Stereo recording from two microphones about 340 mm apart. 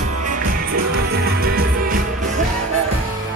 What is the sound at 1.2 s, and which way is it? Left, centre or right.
Music, right.